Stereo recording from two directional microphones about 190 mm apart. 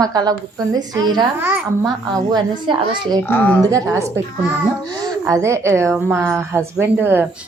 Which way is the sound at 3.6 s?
15° right (ahead or behind).